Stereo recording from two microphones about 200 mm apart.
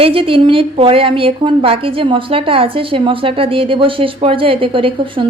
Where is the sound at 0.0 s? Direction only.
25° right (ahead or behind).